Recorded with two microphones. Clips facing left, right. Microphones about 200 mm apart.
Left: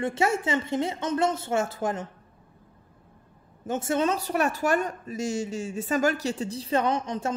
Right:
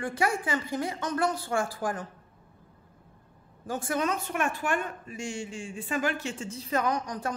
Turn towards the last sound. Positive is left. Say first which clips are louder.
# left 3 dB
turn(degrees=25)  # may be behind; listen again after turning